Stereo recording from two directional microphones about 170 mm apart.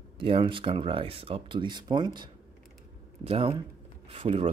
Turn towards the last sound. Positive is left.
turn(degrees=-35)  # may be behind; listen again after turning